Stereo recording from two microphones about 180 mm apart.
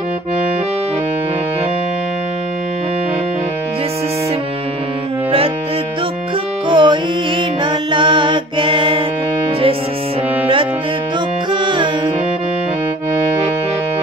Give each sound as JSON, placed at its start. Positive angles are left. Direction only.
{"t": 6.7, "sound": "music", "side_deg": -25}
{"t": 11.5, "sound": "music", "side_deg": -25}